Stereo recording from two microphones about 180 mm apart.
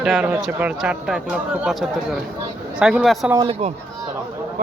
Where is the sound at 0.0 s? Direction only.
5° right (ahead or behind).